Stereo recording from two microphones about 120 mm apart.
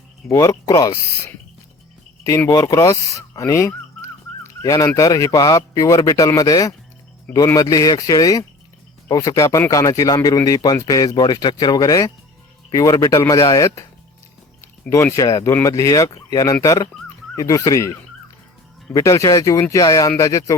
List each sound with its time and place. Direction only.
0.3 s speech: 25° left (ahead or behind)
2.5 s music: 25° left (ahead or behind)
4.6 s speech: 30° left (ahead or behind)
18.9 s speech: 30° left (ahead or behind)